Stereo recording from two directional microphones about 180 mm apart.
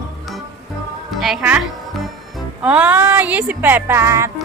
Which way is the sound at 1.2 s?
5° right (ahead or behind).